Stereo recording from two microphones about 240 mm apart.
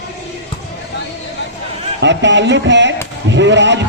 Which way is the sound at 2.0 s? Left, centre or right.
Right.